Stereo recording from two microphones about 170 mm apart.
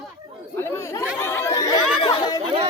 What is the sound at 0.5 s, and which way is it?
Speech, 15° left (ahead or behind).